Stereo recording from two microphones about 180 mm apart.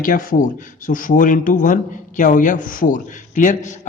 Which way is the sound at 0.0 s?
50° left (ahead or behind).